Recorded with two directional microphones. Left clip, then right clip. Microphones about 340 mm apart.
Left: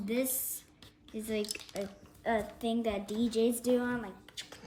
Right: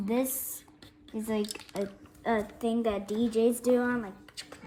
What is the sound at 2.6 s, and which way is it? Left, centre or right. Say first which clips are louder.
Speech: right 4 dB; right.